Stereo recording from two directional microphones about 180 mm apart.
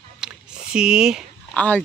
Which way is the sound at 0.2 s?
5° right (ahead or behind).